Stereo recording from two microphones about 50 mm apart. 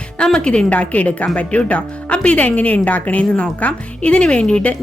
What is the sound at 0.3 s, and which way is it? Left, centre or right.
A woman's voice, left.